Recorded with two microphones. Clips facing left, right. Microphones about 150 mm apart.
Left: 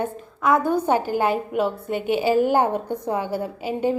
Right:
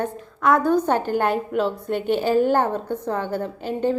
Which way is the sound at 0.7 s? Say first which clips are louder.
Right 1 dB; 10° left (ahead or behind).